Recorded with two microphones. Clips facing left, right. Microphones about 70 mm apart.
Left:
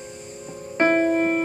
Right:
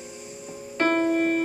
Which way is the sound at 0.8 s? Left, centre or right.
Left.